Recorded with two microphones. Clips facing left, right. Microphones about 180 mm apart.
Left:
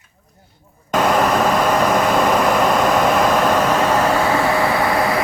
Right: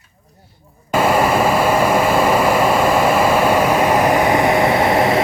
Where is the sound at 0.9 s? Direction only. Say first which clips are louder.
Right 1 dB; 5° right (ahead or behind).